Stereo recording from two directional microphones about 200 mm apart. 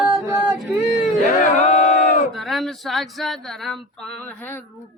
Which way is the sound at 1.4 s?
35° left (ahead or behind).